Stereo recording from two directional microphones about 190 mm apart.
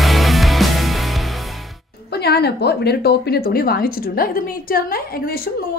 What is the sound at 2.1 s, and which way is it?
A woman's voice, 55° left (ahead or behind).